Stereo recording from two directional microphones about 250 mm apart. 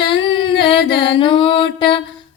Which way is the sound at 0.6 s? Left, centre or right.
Centre.